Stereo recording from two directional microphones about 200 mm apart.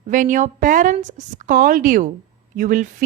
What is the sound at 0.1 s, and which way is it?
A woman's voice, 40° right (ahead or behind).